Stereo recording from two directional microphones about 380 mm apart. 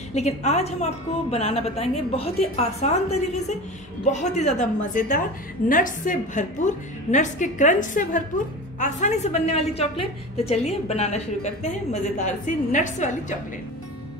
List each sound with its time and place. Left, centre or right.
0.1 s a woman's voice: centre